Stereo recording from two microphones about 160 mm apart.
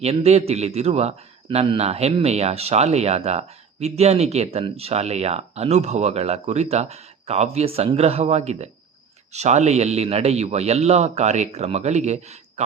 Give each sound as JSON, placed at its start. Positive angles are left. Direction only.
{"t": 0.0, "sound": "a man's voice", "side_deg": -40}